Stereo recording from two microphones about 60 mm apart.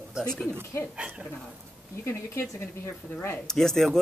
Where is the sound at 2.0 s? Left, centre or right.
Left.